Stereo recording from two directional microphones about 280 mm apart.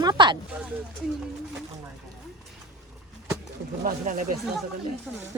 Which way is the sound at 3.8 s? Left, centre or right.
Right.